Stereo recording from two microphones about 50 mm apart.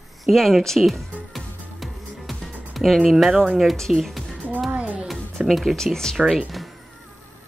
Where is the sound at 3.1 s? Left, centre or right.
Centre.